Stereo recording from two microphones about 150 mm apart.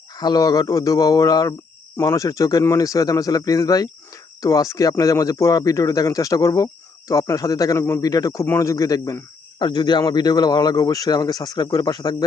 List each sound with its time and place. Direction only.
0.2 s speech: 25° left (ahead or behind)